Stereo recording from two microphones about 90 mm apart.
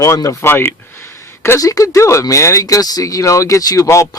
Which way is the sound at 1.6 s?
35° left (ahead or behind).